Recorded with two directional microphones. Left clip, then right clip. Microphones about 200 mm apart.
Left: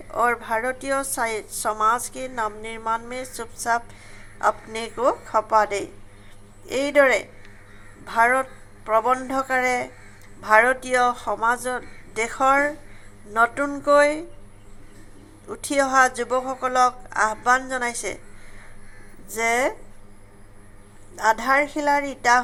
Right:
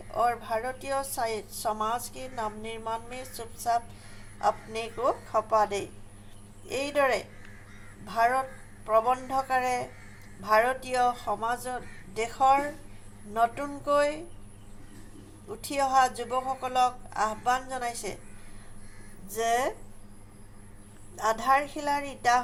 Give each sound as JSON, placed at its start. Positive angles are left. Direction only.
{"t": 0.1, "sound": "a woman's voice", "side_deg": 20}
{"t": 15.6, "sound": "a woman's voice", "side_deg": 25}
{"t": 19.3, "sound": "a woman's voice", "side_deg": 20}
{"t": 21.2, "sound": "a woman's voice", "side_deg": 20}